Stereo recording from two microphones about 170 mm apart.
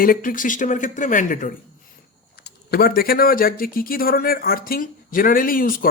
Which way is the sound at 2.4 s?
65° left (ahead or behind).